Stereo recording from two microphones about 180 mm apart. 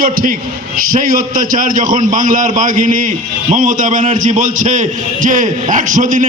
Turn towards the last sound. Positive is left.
turn(degrees=-45)  # may be behind; listen again after turning